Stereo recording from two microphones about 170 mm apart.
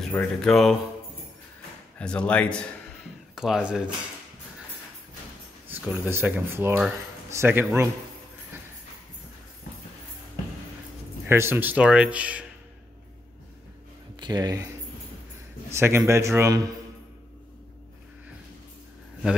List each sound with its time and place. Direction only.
0.0 s speech: 5° left (ahead or behind)
2.0 s speech: 5° left (ahead or behind)
5.7 s speech: 10° right (ahead or behind)
11.2 s speech: 15° right (ahead or behind)
14.2 s speech: 25° right (ahead or behind)
15.7 s speech: 15° right (ahead or behind)